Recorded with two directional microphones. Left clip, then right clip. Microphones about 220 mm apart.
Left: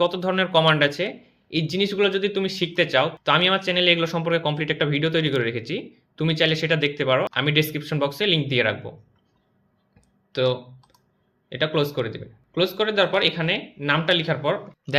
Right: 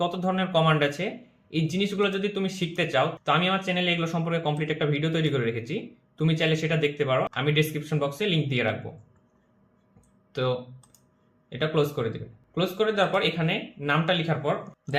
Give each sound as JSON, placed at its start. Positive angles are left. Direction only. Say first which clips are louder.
{"t": 0.0, "sound": "speech", "louder": "left 5 dB", "side_deg": 35}
{"t": 11.4, "sound": "speech", "louder": "left 3 dB", "side_deg": 40}